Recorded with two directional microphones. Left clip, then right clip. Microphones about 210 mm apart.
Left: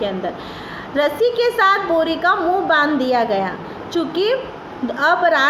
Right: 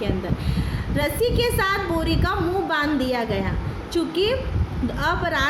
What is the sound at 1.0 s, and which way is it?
A woman's voice, 20° right (ahead or behind).